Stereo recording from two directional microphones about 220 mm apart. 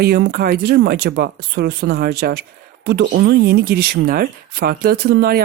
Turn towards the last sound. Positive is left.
turn(degrees=-45)  # may be behind; listen again after turning